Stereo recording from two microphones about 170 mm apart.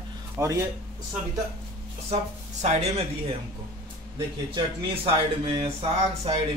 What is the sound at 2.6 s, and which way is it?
Speech, 40° right (ahead or behind).